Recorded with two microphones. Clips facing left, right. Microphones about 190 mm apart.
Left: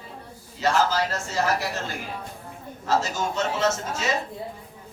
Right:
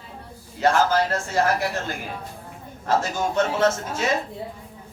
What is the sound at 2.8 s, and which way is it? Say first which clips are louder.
Speech: right 2 dB; 55° right (ahead or behind).